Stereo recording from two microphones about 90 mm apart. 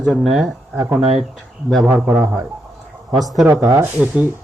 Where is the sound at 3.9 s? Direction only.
15° right (ahead or behind).